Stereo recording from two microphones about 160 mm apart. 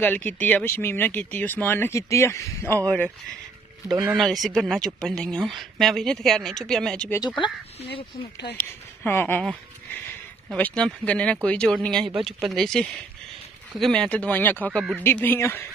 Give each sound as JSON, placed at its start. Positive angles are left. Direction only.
{"t": 0.0, "sound": "speech", "side_deg": 10}
{"t": 3.8, "sound": "speech", "side_deg": -20}
{"t": 4.2, "sound": "speech", "side_deg": 0}
{"t": 7.2, "sound": "speech", "side_deg": 30}
{"t": 7.8, "sound": "speech", "side_deg": 90}
{"t": 8.5, "sound": "speech", "side_deg": 10}